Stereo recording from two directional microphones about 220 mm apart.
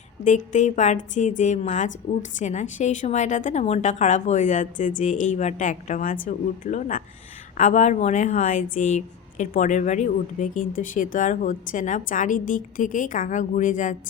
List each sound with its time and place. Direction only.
0.3 s a woman's voice: 35° left (ahead or behind)